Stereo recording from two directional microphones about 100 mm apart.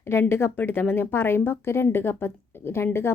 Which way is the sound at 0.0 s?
25° left (ahead or behind).